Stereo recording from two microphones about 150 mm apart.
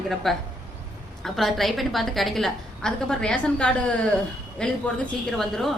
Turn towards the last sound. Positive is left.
turn(degrees=0)  # may be behind; listen again after turning